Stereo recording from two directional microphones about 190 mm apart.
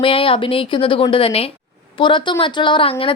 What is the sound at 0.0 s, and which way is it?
A woman's voice, 30° left (ahead or behind).